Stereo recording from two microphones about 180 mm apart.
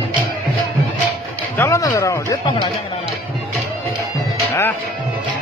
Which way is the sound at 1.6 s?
15° left (ahead or behind).